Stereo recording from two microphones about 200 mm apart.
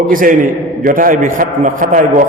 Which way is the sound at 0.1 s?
45° right (ahead or behind).